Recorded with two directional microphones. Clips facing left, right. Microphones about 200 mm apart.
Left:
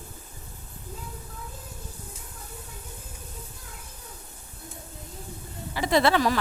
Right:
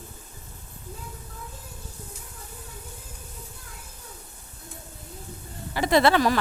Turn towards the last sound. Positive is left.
turn(degrees=-60)  # may be behind; listen again after turning